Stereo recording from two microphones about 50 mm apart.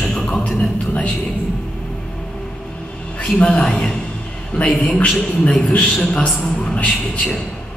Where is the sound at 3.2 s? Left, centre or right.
Left.